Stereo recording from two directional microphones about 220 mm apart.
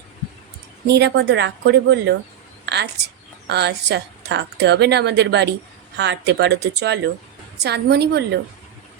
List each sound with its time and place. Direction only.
0.9 s a woman's voice: 50° right (ahead or behind)
2.6 s a sound: 50° right (ahead or behind)
3.4 s a woman's voice: 50° right (ahead or behind)